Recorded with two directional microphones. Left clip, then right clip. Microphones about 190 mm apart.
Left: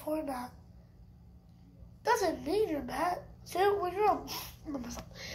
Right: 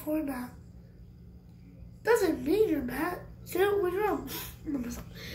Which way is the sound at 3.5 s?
40° left (ahead or behind).